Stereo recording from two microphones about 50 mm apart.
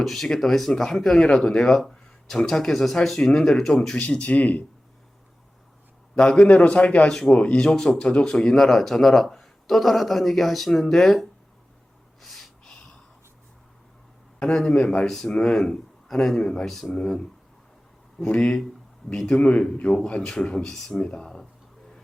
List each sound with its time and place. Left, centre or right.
0.0 s speech: centre
3.9 s speech: left
6.5 s speech: left
7.1 s speech: centre
12.2 s gasp: centre
14.3 s speech: centre
16.9 s speech: centre
21.0 s speech: centre